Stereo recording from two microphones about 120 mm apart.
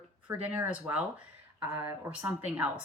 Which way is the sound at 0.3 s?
15° right (ahead or behind).